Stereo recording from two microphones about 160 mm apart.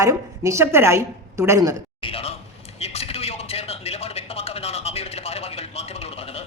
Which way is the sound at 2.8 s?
40° left (ahead or behind).